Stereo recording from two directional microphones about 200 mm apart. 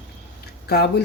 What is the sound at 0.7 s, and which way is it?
Speech, 55° left (ahead or behind).